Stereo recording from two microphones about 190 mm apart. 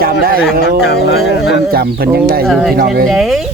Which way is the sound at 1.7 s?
55° right (ahead or behind).